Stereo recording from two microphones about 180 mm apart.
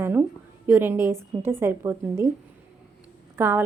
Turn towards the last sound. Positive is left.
turn(degrees=-10)  # may be behind; listen again after turning